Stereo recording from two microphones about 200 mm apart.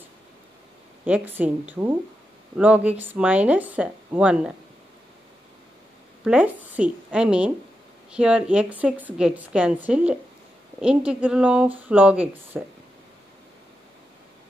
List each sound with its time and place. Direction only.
1.0 s speech: 10° right (ahead or behind)
6.2 s a woman's voice: 5° right (ahead or behind)